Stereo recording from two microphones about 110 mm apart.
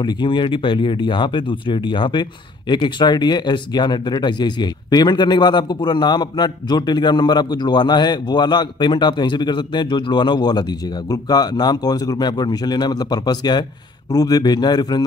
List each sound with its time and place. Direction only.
0.0 s speech: 45° left (ahead or behind)